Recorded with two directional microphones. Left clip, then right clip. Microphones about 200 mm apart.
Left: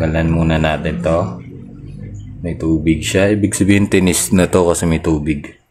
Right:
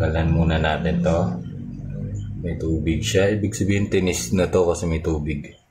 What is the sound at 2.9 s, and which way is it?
Speech, 55° left (ahead or behind).